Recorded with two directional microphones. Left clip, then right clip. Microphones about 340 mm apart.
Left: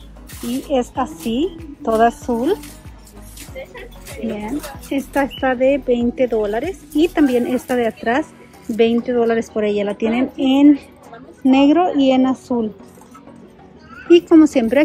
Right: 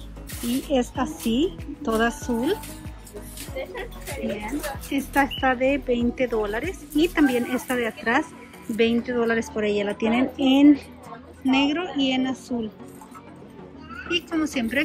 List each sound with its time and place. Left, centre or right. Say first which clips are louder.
0.7 s speech: left 6 dB; centre
3.6 s music: even; right
4.4 s a woman's voice: left 3 dB; centre
14.0 s a woman's voice: left 15 dB; centre